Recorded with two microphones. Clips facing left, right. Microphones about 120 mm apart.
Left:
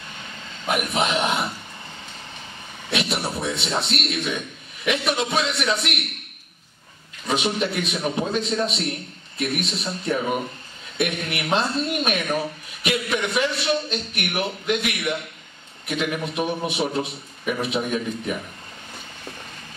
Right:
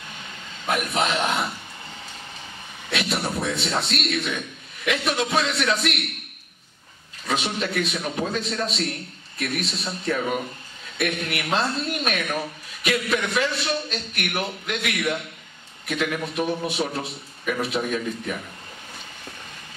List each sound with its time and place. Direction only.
0.7 s a man's voice: 20° left (ahead or behind)
2.9 s a sound: 20° left (ahead or behind)
4.8 s a man's voice: 20° left (ahead or behind)
7.2 s a man's voice: 20° left (ahead or behind)